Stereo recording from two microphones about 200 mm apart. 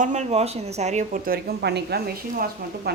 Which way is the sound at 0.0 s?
35° right (ahead or behind).